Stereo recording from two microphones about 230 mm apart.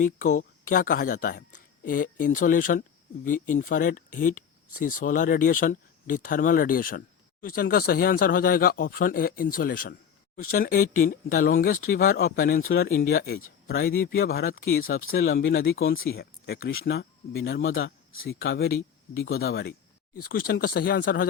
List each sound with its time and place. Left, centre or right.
0.0 s speech: left
18.7 s speech: left
19.4 s speech: left